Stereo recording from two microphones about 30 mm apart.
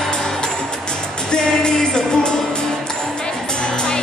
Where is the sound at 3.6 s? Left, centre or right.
Left.